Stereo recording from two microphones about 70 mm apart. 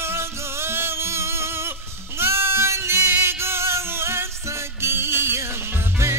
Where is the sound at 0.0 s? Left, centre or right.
Right.